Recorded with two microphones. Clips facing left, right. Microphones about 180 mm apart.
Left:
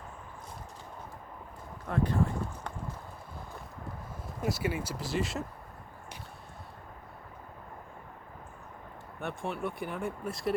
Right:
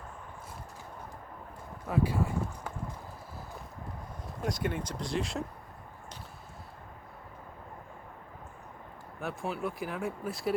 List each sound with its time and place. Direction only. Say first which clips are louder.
1.9 s speech: even; 10° right (ahead or behind)
4.4 s speech: left 1 dB; 5° left (ahead or behind)
9.2 s speech: even; centre (ahead or behind)